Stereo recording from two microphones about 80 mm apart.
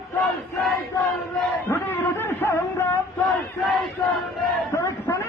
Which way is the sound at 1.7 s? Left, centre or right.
Left.